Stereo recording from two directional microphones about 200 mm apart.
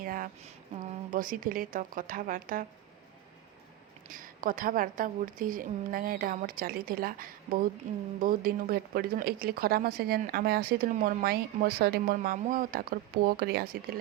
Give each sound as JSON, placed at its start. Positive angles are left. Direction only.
{"t": 0.0, "sound": "a sound", "side_deg": -45}
{"t": 0.9, "sound": "speech", "side_deg": -45}
{"t": 4.1, "sound": "speech", "side_deg": -45}